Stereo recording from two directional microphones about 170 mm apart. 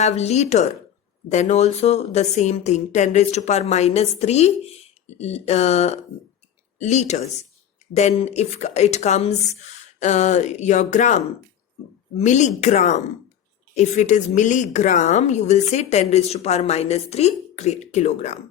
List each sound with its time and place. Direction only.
0.0 s a woman's voice: 40° left (ahead or behind)